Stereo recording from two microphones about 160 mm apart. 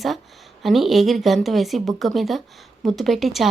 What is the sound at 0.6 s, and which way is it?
A woman's voice, centre (ahead or behind).